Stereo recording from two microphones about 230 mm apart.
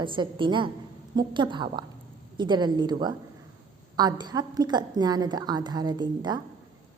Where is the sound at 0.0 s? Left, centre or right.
Right.